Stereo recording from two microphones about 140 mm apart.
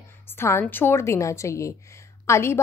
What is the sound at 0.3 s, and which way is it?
A woman's voice, 15° left (ahead or behind).